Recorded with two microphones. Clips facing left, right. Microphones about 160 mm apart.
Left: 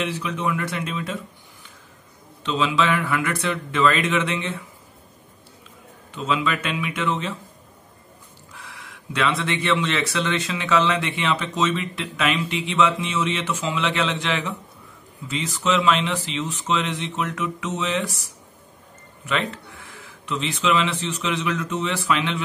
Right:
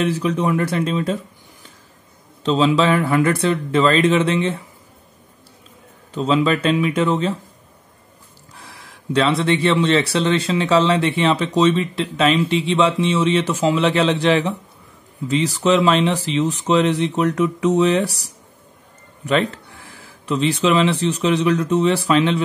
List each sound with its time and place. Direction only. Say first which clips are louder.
0.0 s speech: right 7 dB; 40° right (ahead or behind)
2.4 s speech: right 6 dB; 35° right (ahead or behind)
6.1 s speech: right 7 dB; 35° right (ahead or behind)
8.5 s speech: right 1 dB; 35° right (ahead or behind)
19.2 s speech: right 7 dB; 35° right (ahead or behind)